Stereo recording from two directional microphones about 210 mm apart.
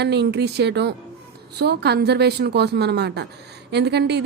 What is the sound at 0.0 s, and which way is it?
A woman's voice, 55° right (ahead or behind).